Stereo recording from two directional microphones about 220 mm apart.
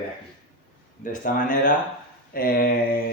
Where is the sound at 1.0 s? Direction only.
35° left (ahead or behind).